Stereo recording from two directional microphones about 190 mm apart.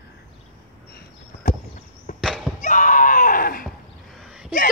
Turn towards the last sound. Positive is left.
turn(degrees=0)  # may be behind; listen again after turning